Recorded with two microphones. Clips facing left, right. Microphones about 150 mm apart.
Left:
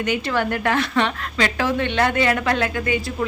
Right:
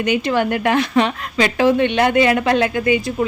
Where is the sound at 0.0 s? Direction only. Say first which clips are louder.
Right 4 dB; 15° right (ahead or behind).